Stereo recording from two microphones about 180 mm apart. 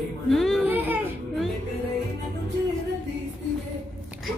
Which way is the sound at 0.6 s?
10° right (ahead or behind).